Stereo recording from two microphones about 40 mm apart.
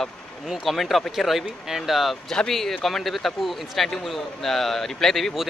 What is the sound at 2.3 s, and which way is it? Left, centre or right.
Speech, centre.